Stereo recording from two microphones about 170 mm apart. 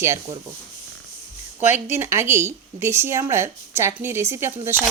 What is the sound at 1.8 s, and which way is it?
Speech, 15° right (ahead or behind).